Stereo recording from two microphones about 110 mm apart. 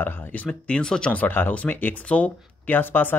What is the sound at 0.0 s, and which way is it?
Speech, 20° left (ahead or behind).